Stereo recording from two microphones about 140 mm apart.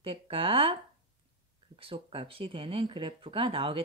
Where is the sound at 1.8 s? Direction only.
40° right (ahead or behind).